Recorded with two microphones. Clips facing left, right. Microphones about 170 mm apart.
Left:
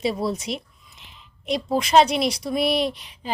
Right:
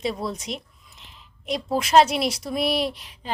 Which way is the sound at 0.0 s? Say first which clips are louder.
Left 4 dB; 5° left (ahead or behind).